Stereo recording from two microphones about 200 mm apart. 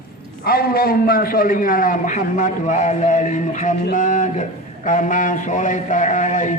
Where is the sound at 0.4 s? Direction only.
45° left (ahead or behind).